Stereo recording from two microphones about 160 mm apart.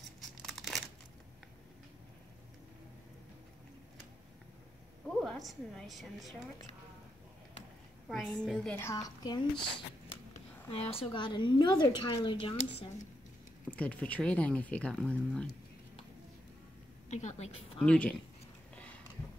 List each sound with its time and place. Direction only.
0.4 s crumpling: centre (ahead or behind)
5.0 s a woman's voice: centre (ahead or behind)
8.1 s a woman's voice: centre (ahead or behind)
8.7 s speech: 20° left (ahead or behind)
10.7 s speech: 40° left (ahead or behind)
13.7 s speech: 10° left (ahead or behind)
17.1 s a woman's voice: 45° left (ahead or behind)
17.7 s speech: 5° left (ahead or behind)